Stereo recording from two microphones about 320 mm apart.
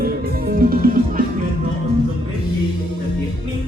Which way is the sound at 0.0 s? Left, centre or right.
Right.